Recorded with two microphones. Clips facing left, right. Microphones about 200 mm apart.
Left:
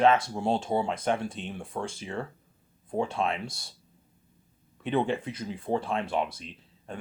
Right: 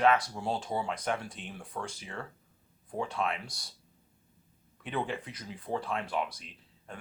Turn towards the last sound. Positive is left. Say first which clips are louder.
# left 6 dB
turn(degrees=25)  # may be behind; listen again after turning